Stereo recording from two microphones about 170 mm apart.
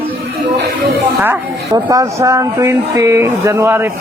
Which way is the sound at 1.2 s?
15° right (ahead or behind).